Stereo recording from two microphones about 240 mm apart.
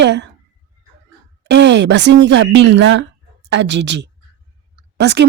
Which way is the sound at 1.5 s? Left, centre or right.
Right.